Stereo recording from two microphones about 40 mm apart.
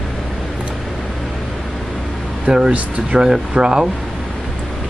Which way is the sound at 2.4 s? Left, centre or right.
Centre.